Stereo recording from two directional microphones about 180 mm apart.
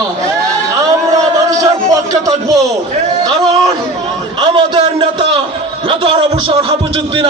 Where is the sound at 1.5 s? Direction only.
20° right (ahead or behind).